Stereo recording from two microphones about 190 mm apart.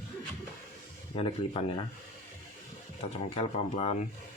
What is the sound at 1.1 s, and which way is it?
Speech, 30° left (ahead or behind).